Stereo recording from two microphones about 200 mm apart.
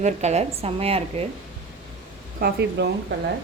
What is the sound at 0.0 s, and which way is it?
A woman's voice, 35° right (ahead or behind).